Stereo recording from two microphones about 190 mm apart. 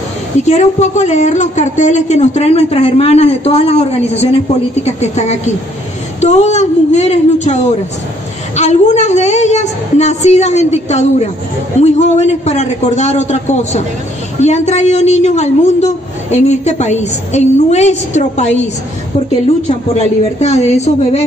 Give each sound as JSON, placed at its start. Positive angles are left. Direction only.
{"t": 0.4, "sound": "a woman's voice", "side_deg": 35}
{"t": 20.0, "sound": "a woman's voice", "side_deg": 35}